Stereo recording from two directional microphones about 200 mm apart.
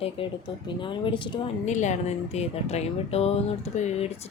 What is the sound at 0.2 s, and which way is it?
Speech, 25° left (ahead or behind).